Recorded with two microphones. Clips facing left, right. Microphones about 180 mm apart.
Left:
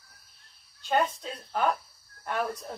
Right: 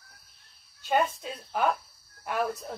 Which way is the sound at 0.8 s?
5° right (ahead or behind).